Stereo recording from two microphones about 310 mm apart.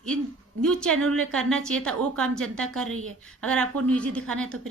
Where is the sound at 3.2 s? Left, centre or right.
Centre.